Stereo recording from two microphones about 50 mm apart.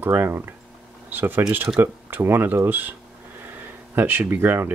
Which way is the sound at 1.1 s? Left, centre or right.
Right.